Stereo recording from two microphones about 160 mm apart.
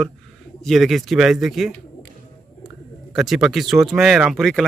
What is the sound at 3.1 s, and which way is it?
A man's voice, centre (ahead or behind).